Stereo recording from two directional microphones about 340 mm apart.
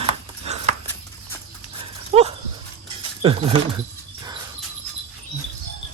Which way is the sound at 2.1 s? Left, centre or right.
Centre.